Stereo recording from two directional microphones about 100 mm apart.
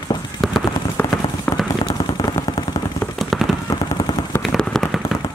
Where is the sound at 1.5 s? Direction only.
15° left (ahead or behind).